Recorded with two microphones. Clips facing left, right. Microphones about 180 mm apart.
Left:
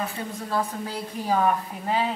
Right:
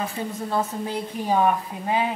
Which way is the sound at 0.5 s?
25° right (ahead or behind).